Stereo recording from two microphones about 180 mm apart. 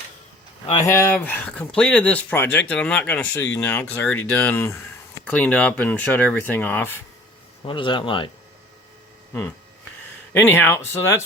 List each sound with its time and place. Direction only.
0.9 s speech: 15° left (ahead or behind)
7.7 s speech: 25° left (ahead or behind)
10.3 s speech: 10° left (ahead or behind)